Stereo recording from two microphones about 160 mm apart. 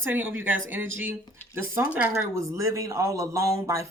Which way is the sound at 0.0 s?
10° right (ahead or behind).